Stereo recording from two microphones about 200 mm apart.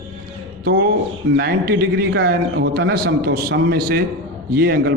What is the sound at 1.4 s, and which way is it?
A man's voice, 55° right (ahead or behind).